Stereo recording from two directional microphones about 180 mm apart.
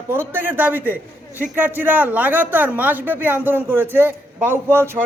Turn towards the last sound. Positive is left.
turn(degrees=-15)  # may be behind; listen again after turning